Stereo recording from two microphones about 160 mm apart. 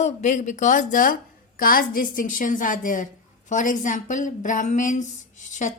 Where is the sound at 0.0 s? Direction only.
50° left (ahead or behind).